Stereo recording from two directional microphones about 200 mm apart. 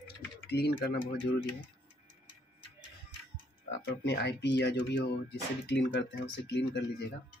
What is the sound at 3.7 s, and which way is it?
Speech, 60° left (ahead or behind).